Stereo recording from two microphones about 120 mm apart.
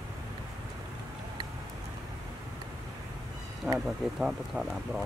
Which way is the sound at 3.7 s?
5° right (ahead or behind).